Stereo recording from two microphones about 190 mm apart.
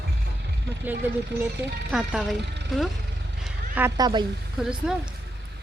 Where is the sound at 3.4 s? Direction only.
10° right (ahead or behind).